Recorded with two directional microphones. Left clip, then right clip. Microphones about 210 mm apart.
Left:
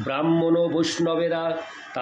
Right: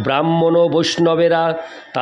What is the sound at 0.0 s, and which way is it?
Speech, 45° right (ahead or behind).